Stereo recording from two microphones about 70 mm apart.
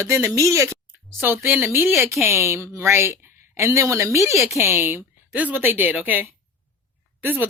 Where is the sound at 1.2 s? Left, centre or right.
Right.